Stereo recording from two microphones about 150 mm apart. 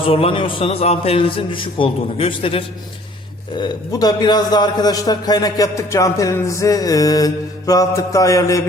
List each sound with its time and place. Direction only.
0.0 s a man's voice: 40° left (ahead or behind)
3.6 s a man's voice: 25° left (ahead or behind)